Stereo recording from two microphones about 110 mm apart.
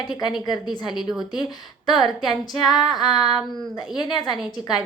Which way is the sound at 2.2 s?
40° left (ahead or behind).